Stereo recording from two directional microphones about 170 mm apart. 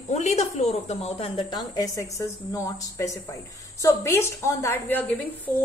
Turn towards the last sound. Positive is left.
turn(degrees=10)  # may be behind; listen again after turning